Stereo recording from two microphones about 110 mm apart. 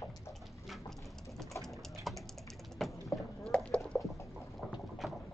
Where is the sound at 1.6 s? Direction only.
Centre (ahead or behind).